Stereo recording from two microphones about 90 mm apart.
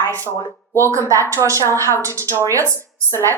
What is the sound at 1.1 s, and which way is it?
A woman's voice, 35° right (ahead or behind).